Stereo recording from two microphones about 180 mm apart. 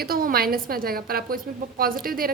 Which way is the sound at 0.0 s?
55° right (ahead or behind).